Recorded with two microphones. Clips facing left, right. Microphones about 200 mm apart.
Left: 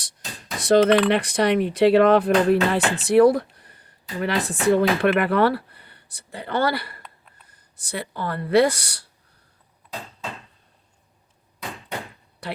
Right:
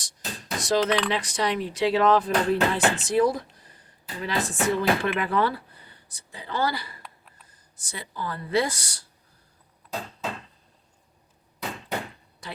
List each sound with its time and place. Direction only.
0.6 s speech: 55° left (ahead or behind)
7.0 s a sound: centre (ahead or behind)
7.4 s speech: 65° left (ahead or behind)
12.4 s speech: 65° left (ahead or behind)